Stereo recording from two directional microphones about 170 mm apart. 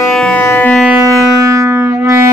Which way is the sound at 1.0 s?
20° right (ahead or behind).